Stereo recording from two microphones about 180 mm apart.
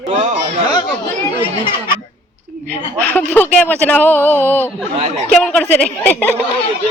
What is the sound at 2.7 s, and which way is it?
A woman's voice, 10° left (ahead or behind).